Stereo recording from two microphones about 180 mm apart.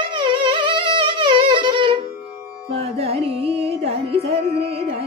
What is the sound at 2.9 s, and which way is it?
Music, 35° right (ahead or behind).